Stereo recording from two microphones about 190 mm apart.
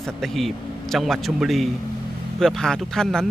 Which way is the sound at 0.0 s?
Centre (ahead or behind).